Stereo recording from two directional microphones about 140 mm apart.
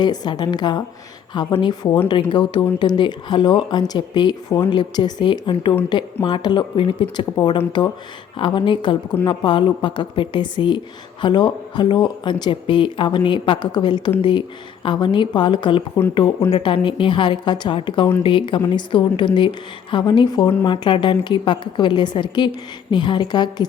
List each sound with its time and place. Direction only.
0.0 s a woman's voice: 30° left (ahead or behind)